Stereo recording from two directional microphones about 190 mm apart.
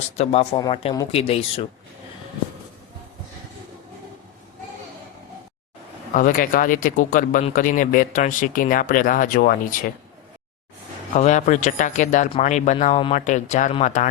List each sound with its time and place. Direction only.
0.2 s speech: 35° left (ahead or behind)
6.1 s speech: 45° left (ahead or behind)
11.1 s speech: 40° left (ahead or behind)